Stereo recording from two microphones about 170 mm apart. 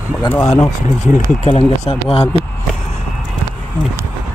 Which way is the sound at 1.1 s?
40° left (ahead or behind).